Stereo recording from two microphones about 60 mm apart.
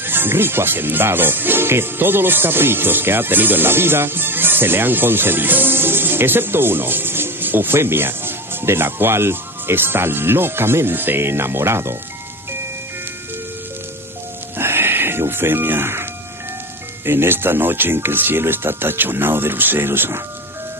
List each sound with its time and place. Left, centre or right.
0.0 s music: right
14.6 s music: right